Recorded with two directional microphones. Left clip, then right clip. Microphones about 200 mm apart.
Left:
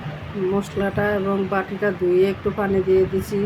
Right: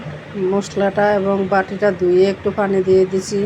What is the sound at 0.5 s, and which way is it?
Speech, 10° right (ahead or behind).